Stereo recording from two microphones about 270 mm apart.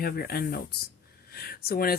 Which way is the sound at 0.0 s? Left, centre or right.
Left.